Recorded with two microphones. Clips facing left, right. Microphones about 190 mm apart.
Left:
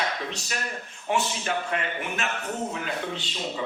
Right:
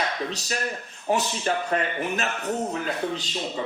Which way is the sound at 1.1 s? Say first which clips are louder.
Right 2 dB; 40° right (ahead or behind).